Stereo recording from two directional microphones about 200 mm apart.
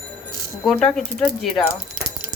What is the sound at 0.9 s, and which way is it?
Speech, centre (ahead or behind).